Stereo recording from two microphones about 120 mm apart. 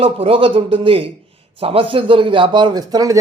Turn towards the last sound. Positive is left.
turn(degrees=-30)  # may be behind; listen again after turning